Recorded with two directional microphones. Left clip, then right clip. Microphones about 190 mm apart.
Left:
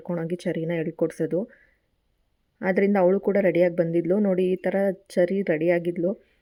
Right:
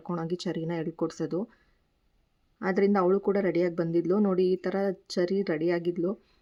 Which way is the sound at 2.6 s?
20° left (ahead or behind).